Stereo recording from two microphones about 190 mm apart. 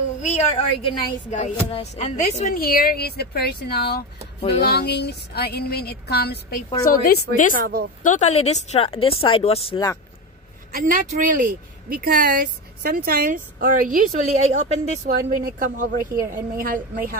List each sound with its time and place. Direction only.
0.2 s speech: 35° left (ahead or behind)
2.5 s a sound: 50° left (ahead or behind)
6.9 s a woman's voice: 50° left (ahead or behind)
7.5 s speech: 50° right (ahead or behind)
8.0 s speech: 40° left (ahead or behind)
10.7 s speech: 45° right (ahead or behind)